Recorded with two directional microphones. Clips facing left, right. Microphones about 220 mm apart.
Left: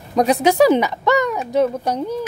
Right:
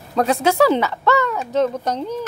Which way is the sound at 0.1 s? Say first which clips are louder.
Left 2 dB; 15° left (ahead or behind).